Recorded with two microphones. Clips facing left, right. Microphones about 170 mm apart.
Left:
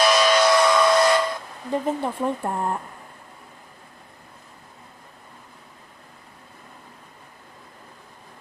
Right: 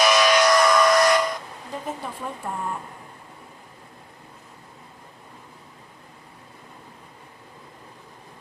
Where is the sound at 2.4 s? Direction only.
55° left (ahead or behind).